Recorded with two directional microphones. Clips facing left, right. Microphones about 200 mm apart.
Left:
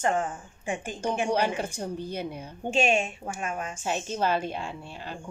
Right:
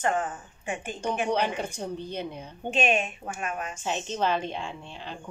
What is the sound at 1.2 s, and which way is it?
Speech, 10° left (ahead or behind).